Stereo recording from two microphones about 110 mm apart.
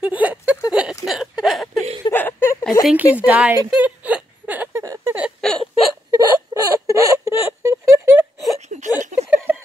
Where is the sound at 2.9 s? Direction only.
15° right (ahead or behind).